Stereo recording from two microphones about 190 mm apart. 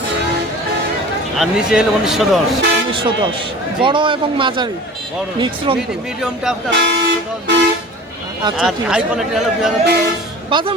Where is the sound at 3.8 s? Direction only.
25° right (ahead or behind).